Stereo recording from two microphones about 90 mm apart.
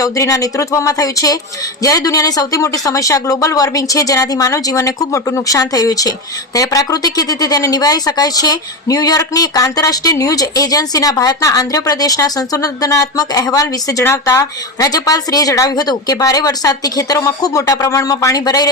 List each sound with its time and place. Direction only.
0.0 s speech: 40° left (ahead or behind)
14.0 s speech: 30° left (ahead or behind); by 18.7 s 45° left (ahead or behind)